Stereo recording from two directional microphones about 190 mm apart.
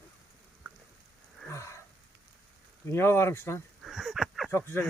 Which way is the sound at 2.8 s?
15° left (ahead or behind).